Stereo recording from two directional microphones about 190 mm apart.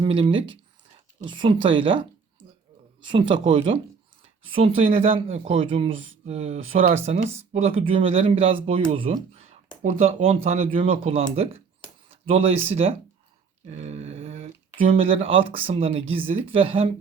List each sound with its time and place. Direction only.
0.0 s speech: 25° right (ahead or behind)
13.7 s a sound: 35° right (ahead or behind)
14.9 s speech: 30° right (ahead or behind)